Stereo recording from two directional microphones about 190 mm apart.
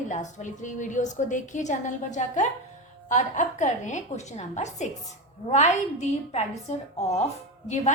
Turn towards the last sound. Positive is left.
turn(degrees=40)  # may be behind; listen again after turning